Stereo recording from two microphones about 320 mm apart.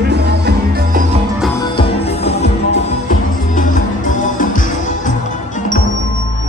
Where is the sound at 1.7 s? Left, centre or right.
Centre.